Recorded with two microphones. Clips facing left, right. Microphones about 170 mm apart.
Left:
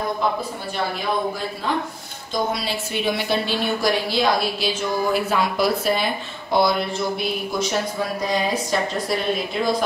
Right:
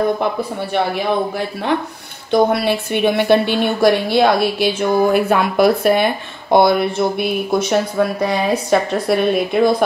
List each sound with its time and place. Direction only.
0.7 s a woman's voice: 65° right (ahead or behind)
2.3 s a woman's voice: 60° right (ahead or behind)